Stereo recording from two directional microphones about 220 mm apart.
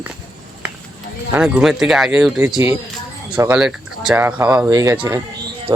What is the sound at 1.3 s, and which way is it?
Speech, 5° right (ahead or behind).